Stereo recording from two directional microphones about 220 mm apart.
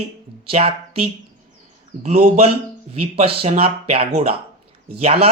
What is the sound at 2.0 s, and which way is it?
A man's voice, 30° right (ahead or behind).